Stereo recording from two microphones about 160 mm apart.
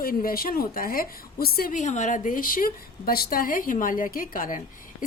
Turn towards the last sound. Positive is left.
turn(degrees=55)  # may be behind; listen again after turning